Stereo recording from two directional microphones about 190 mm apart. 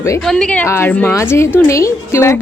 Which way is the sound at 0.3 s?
5° left (ahead or behind).